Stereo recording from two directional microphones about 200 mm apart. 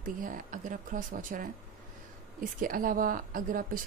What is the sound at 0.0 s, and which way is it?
Speech, 40° right (ahead or behind).